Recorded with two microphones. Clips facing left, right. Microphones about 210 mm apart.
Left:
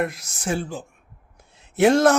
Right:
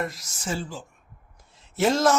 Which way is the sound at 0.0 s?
60° left (ahead or behind).